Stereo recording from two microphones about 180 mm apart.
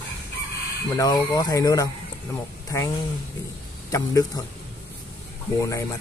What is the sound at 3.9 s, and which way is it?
Speech, 20° left (ahead or behind).